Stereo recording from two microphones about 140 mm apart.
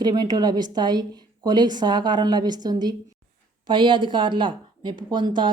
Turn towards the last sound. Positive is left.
turn(degrees=-35)  # may be behind; listen again after turning